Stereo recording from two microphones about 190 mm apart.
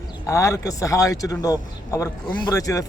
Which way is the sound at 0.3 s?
15° left (ahead or behind).